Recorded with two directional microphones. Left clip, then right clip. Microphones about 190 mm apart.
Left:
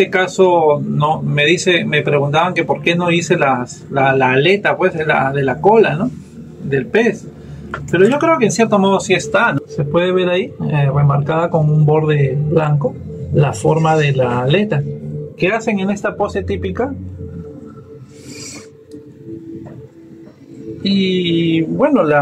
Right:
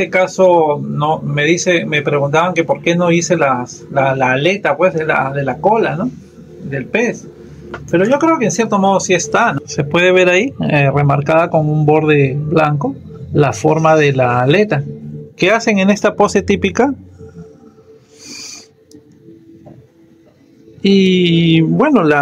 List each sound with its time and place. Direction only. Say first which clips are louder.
0.0 s speech: right 1 dB; 20° right (ahead or behind)
6.7 s a man's voice: left 2 dB; 15° right (ahead or behind); by 16.9 s 45° right (ahead or behind)
20.8 s speech: right 5 dB; 40° right (ahead or behind)